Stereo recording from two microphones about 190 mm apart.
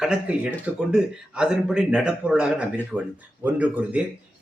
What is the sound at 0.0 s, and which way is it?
Speech, 5° right (ahead or behind).